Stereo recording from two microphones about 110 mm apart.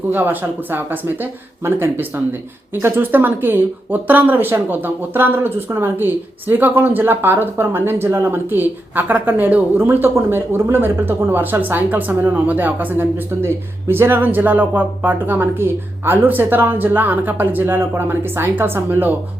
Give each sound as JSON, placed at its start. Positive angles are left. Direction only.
{"t": 0.1, "sound": "speech", "side_deg": -15}